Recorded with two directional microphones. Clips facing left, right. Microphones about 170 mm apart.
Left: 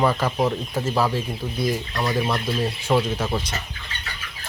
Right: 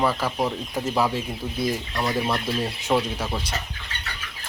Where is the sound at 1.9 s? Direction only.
Centre (ahead or behind).